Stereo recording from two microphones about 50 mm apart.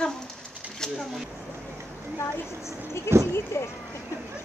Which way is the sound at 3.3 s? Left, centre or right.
Left.